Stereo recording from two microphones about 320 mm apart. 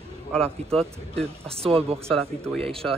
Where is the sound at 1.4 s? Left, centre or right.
Centre.